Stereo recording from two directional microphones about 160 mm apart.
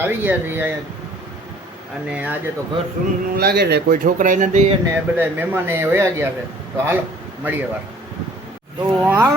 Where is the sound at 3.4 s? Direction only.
85° right.